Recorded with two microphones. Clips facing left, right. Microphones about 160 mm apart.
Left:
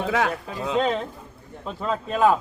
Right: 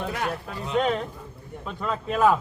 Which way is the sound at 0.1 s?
90° left.